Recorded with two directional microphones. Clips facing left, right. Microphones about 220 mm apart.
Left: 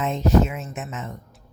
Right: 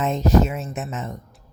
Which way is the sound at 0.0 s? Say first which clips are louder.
Right 1 dB; 40° right (ahead or behind).